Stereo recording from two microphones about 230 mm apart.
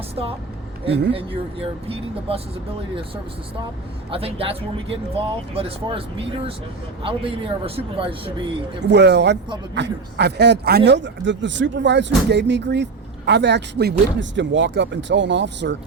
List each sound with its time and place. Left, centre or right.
1.1 s speech: right
4.1 s speech: right
8.9 s speech: right